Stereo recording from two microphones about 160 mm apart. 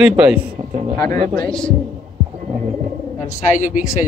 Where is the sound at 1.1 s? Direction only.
60° right (ahead or behind).